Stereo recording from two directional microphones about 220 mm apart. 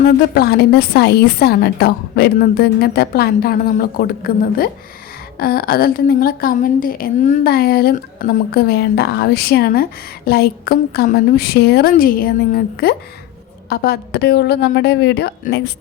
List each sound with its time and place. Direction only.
0.0 s a woman's voice: 45° left (ahead or behind)